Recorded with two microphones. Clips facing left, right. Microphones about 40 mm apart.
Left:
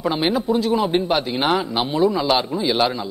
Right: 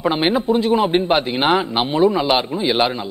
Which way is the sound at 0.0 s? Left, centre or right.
Right.